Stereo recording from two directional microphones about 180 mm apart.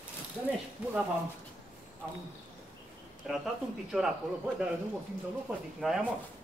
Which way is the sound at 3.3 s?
Centre (ahead or behind).